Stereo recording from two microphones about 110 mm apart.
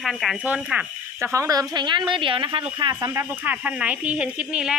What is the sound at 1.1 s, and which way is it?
Speech, 25° right (ahead or behind).